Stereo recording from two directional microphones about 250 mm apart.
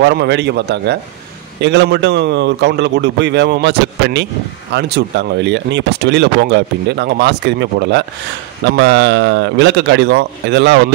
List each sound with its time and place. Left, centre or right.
0.0 s speech: right